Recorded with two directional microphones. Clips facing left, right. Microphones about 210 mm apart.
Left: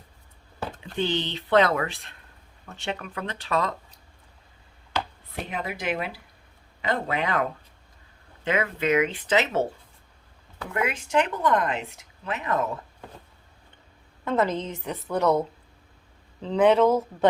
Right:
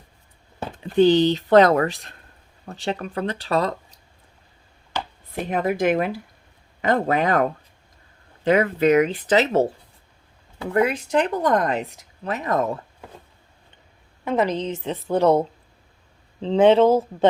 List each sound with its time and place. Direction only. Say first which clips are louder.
0.8 s speech: right 13 dB; 40° right (ahead or behind)
5.5 s speech: right 10 dB; 45° right (ahead or behind)
14.3 s a woman's voice: right 3 dB; 15° right (ahead or behind)